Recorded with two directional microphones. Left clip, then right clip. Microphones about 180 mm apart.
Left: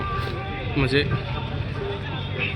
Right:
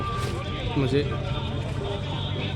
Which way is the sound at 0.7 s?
5° right (ahead or behind).